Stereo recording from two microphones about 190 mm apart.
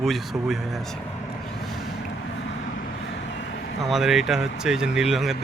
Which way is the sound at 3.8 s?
Centre (ahead or behind).